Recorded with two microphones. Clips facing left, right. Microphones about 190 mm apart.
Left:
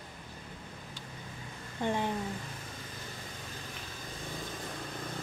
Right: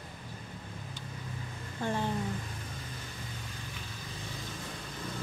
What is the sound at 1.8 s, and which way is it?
Speech, 15° left (ahead or behind).